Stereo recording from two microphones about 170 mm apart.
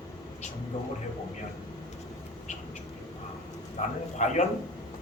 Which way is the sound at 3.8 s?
45° left (ahead or behind).